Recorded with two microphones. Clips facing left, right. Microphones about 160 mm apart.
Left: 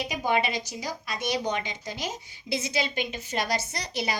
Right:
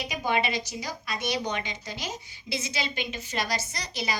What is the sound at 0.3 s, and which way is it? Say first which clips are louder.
A woman's voice: left 1 dB; 40° left (ahead or behind).